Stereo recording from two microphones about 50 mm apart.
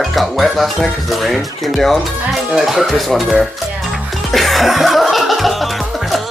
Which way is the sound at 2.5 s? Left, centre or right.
Centre.